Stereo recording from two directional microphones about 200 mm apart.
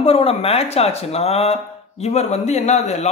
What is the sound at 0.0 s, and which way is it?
A man's voice, 30° left (ahead or behind).